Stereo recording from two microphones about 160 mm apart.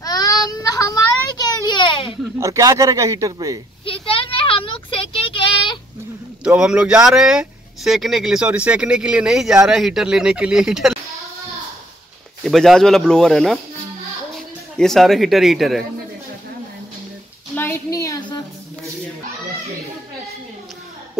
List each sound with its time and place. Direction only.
0.0 s child singing: 25° left (ahead or behind)
1.4 s a sound: 25° left (ahead or behind)
2.4 s a man's voice: 20° right (ahead or behind)
3.8 s vehicle: 35° left (ahead or behind)
5.3 s child singing: 30° left (ahead or behind)
6.4 s speech: 5° right (ahead or behind)
12.4 s speech: centre (ahead or behind)
14.8 s speech: centre (ahead or behind)
17.6 s a sound: 15° left (ahead or behind)